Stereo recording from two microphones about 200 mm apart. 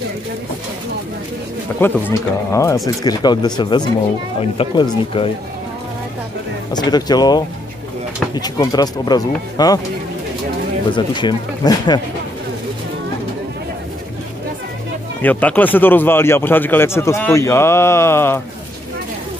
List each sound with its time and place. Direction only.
1.8 s speech: 10° left (ahead or behind)
6.7 s speech: 20° left (ahead or behind)
10.9 s speech: 25° left (ahead or behind)
15.2 s speech: 10° left (ahead or behind)